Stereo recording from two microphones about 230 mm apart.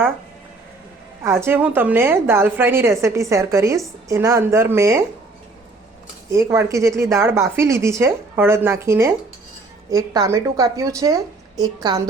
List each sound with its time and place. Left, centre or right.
1.2 s a woman's voice: centre
6.5 s a woman's voice: centre